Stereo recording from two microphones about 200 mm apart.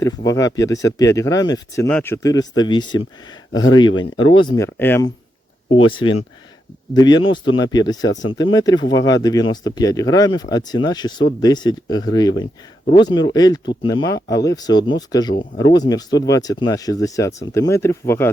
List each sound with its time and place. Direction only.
0.0 s speech: 15° left (ahead or behind)
5.7 s speech: 25° left (ahead or behind)